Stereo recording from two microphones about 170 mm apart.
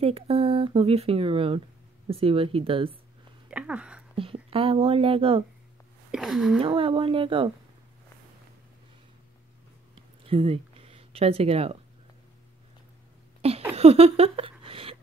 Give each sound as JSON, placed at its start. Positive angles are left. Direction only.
{"t": 0.0, "sound": "speech", "side_deg": -35}
{"t": 3.4, "sound": "a sound", "side_deg": -5}
{"t": 4.2, "sound": "speech", "side_deg": -35}
{"t": 6.1, "sound": "speech", "side_deg": 0}
{"t": 6.6, "sound": "speech", "side_deg": -30}
{"t": 10.2, "sound": "speech", "side_deg": -35}
{"t": 13.4, "sound": "a sound", "side_deg": -35}